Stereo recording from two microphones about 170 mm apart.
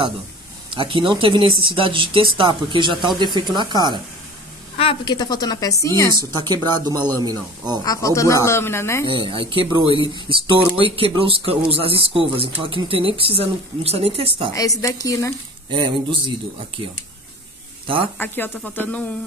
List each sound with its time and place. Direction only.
0.7 s speech: 30° right (ahead or behind)
4.7 s a woman's voice: 30° left (ahead or behind)
6.4 s speech: 25° right (ahead or behind)
7.8 s speech: 20° left (ahead or behind)
9.0 s speech: 30° right (ahead or behind)
14.5 s a woman's voice: 20° left (ahead or behind)
15.7 s speech: 30° right (ahead or behind)
18.1 s speech: 10° left (ahead or behind)